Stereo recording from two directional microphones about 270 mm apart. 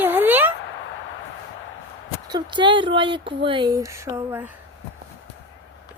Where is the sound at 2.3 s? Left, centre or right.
Centre.